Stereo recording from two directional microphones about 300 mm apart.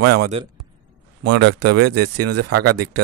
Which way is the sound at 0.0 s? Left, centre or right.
Right.